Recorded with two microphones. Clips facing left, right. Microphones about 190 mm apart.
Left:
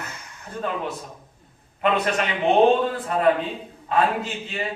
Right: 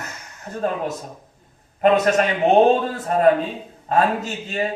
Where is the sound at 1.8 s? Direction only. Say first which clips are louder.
Right 6 dB; 40° right (ahead or behind).